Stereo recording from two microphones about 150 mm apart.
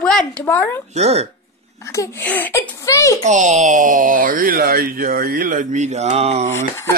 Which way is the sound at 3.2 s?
55° right (ahead or behind).